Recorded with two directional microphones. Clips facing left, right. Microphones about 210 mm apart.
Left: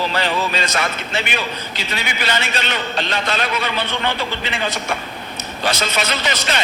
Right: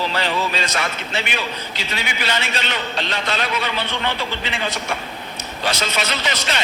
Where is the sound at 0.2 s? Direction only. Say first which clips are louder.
Left 2 dB; 45° left (ahead or behind).